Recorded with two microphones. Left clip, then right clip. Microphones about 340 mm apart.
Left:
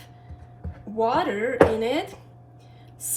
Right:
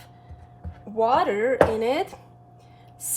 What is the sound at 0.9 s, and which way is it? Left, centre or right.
A woman's voice, centre.